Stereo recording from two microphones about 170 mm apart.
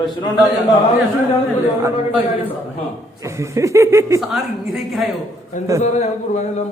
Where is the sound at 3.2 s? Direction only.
20° right (ahead or behind).